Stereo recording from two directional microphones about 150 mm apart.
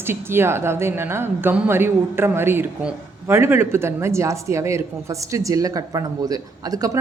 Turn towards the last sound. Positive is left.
turn(degrees=-25)  # may be behind; listen again after turning